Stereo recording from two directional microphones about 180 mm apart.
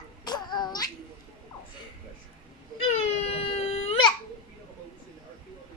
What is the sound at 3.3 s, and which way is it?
Baby cry, 35° left (ahead or behind).